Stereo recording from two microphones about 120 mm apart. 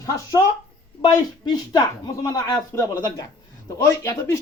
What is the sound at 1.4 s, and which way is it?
Speech, 35° left (ahead or behind).